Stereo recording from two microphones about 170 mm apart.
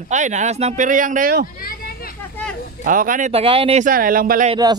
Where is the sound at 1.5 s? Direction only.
60° left (ahead or behind).